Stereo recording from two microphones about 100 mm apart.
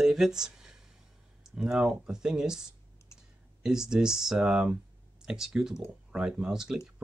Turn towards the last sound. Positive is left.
turn(degrees=-5)  # may be behind; listen again after turning